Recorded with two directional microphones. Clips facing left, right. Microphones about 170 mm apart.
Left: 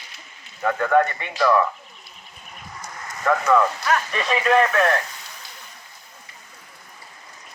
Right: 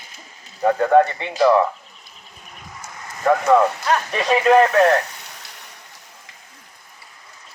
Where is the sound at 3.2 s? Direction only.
30° right (ahead or behind).